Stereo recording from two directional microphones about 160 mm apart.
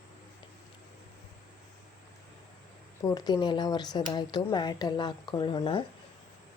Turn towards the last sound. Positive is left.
turn(degrees=30)  # may be behind; listen again after turning